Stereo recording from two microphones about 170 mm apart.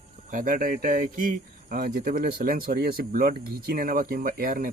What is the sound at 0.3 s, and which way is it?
Speech, 55° right (ahead or behind).